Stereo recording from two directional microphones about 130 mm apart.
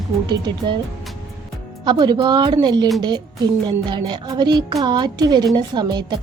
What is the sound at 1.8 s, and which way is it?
A woman's voice, 35° right (ahead or behind).